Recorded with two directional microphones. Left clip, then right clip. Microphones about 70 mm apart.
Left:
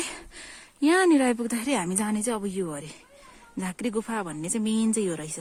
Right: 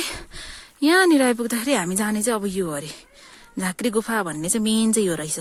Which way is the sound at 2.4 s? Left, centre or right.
Right.